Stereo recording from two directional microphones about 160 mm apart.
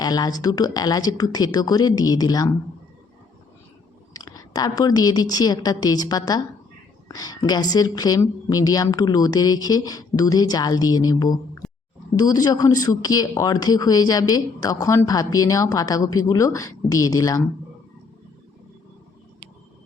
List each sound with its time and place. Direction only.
0.0 s speech: 25° left (ahead or behind)
4.1 s speech: 25° left (ahead or behind)